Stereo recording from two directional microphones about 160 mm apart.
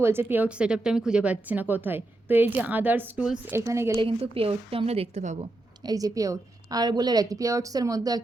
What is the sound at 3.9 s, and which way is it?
A woman's voice, 35° right (ahead or behind).